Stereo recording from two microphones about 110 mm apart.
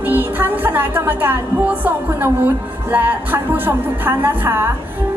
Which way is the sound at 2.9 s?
15° right (ahead or behind).